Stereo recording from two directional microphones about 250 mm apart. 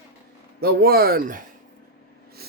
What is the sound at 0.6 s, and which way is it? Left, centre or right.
Speech, right.